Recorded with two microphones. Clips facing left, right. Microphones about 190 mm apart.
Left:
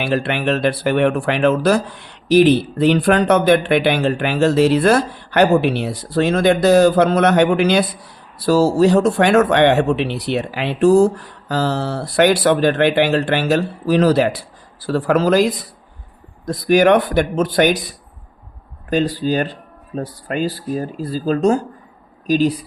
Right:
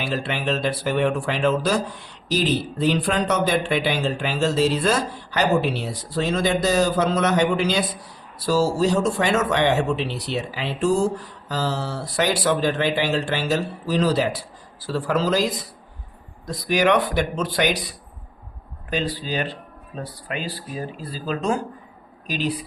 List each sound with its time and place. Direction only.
0.0 s speech: 65° left (ahead or behind); by 22.5 s 45° left (ahead or behind)